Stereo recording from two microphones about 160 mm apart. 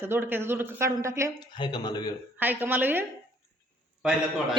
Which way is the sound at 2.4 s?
10° right (ahead or behind).